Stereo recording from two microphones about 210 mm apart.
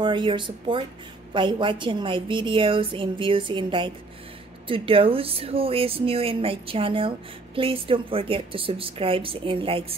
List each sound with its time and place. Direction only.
0.0 s a woman's voice: 20° right (ahead or behind)